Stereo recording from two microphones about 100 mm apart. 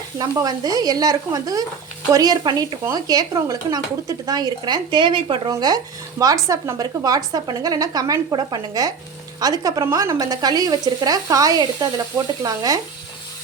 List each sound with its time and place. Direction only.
0.2 s speech: 40° right (ahead or behind)
5.5 s speech: 40° right (ahead or behind)